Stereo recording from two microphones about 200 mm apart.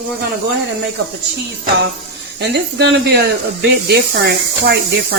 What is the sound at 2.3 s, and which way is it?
Speech, 55° right (ahead or behind).